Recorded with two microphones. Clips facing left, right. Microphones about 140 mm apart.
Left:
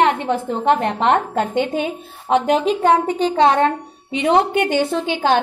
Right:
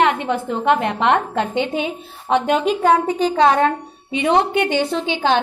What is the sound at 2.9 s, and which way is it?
Speech, 25° left (ahead or behind).